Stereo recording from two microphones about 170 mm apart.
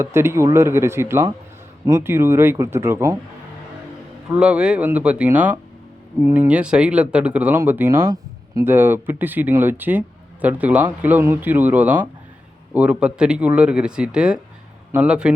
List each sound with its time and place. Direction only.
0.0 s speech: 15° right (ahead or behind)
4.4 s speech: 5° right (ahead or behind)